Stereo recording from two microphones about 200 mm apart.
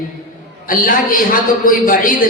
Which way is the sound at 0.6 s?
45° left (ahead or behind).